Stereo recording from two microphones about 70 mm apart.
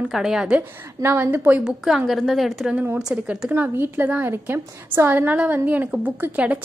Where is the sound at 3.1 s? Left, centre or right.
Centre.